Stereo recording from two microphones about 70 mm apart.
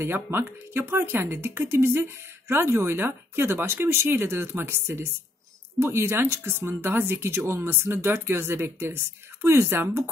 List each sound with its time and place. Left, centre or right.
0.0 s speech: right